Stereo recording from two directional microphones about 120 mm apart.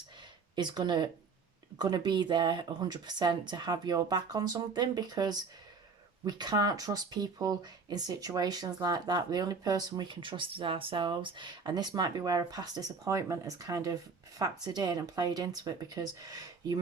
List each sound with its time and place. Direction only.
0.5 s speech: 35° right (ahead or behind)